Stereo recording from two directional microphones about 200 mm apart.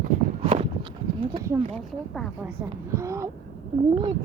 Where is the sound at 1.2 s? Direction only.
20° right (ahead or behind).